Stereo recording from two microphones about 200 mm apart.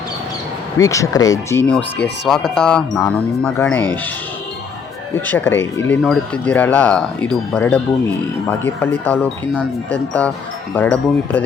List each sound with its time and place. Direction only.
0.8 s speech: 15° left (ahead or behind)
5.1 s speech: 10° left (ahead or behind)